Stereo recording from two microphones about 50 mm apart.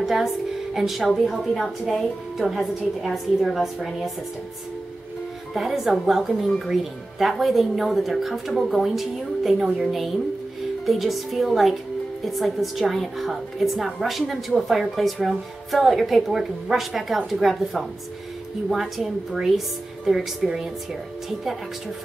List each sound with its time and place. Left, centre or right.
0.0 s a woman's voice: centre
5.5 s a woman's voice: centre
20.1 s a woman's voice: centre